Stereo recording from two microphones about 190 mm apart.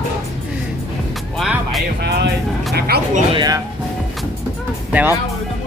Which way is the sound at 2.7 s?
55° right (ahead or behind).